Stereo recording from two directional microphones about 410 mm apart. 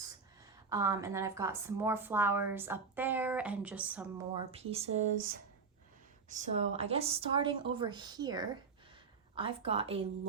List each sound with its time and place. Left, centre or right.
0.7 s a woman's voice: centre
4.5 s speech: centre